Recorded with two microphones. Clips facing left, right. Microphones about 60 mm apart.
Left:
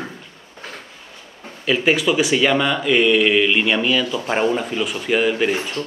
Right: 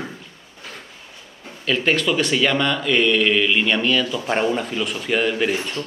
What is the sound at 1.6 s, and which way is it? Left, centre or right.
Speech, centre.